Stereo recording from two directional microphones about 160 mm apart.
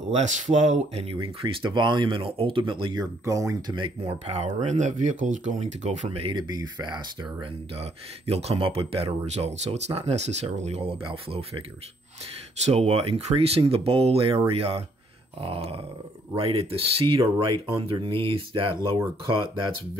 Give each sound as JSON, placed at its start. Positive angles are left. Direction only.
{"t": 0.0, "sound": "speech", "side_deg": -45}
{"t": 1.1, "sound": "speech", "side_deg": -30}
{"t": 7.8, "sound": "speech", "side_deg": -40}
{"t": 12.6, "sound": "speech", "side_deg": -40}